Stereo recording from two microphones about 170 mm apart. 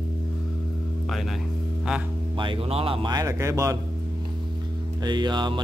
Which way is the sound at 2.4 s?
35° right (ahead or behind).